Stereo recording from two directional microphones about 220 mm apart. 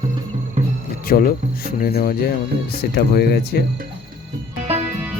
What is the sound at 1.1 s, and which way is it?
Speech, 40° left (ahead or behind).